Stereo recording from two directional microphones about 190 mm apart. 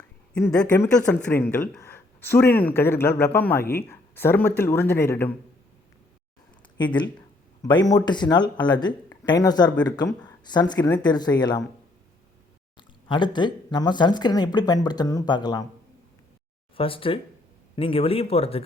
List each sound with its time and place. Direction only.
0.3 s speech: 10° left (ahead or behind)
6.7 s speech: 25° left (ahead or behind)
12.7 s speech: 25° left (ahead or behind)
16.7 s speech: 30° left (ahead or behind)